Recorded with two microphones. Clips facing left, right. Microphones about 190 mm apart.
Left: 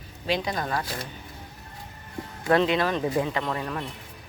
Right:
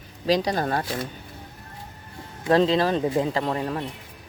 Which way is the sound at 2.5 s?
30° right (ahead or behind).